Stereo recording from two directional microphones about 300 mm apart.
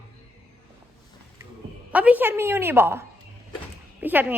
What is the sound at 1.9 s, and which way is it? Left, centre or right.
A woman's voice, centre.